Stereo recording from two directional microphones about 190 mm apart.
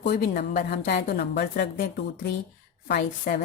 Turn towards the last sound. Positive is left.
turn(degrees=50)  # may be behind; listen again after turning